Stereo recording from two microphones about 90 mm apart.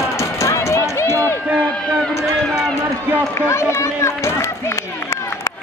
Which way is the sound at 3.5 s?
30° left (ahead or behind).